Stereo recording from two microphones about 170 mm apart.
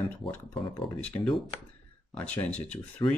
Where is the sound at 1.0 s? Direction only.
10° left (ahead or behind).